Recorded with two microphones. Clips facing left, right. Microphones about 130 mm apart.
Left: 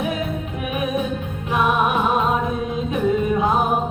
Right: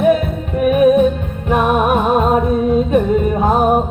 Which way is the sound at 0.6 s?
50° right (ahead or behind).